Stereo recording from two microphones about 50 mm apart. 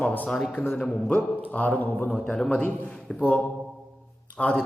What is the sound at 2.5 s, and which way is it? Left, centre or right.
Speech, left.